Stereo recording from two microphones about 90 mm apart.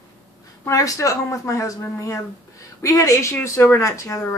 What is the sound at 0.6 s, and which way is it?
Speech, 35° left (ahead or behind).